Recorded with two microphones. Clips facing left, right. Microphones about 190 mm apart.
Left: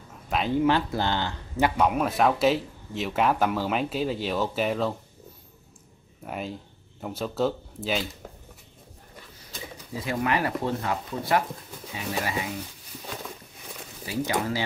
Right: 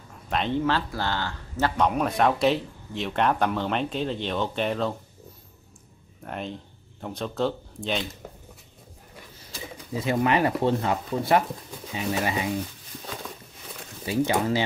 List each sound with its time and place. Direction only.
0.3 s speech: 5° left (ahead or behind)
0.7 s speech: 20° left (ahead or behind)
1.8 s speech: 5° left (ahead or behind)
6.2 s speech: 5° left (ahead or behind)
9.9 s speech: 25° right (ahead or behind)
14.0 s speech: 25° right (ahead or behind)